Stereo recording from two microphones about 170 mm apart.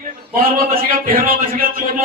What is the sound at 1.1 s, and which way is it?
Speech, 60° right (ahead or behind).